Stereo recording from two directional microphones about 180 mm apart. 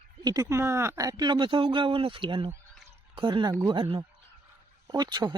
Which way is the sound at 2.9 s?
30° right (ahead or behind).